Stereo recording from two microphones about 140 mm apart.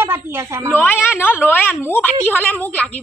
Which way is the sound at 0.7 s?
15° left (ahead or behind).